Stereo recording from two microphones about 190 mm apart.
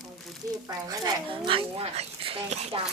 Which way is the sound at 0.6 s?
20° right (ahead or behind).